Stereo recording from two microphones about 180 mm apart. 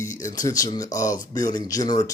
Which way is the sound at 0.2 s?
20° left (ahead or behind).